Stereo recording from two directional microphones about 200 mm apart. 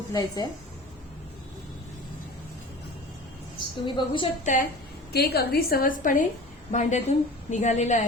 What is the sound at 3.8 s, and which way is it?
Speech, 25° left (ahead or behind).